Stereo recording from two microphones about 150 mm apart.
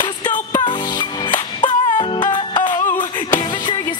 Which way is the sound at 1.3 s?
30° left (ahead or behind).